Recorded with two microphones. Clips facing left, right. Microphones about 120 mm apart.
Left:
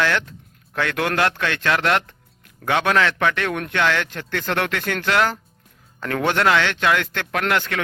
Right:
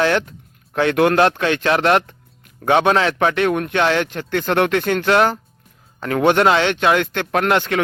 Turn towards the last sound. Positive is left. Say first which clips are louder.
# right 5 dB
turn(degrees=-20)  # may be behind; listen again after turning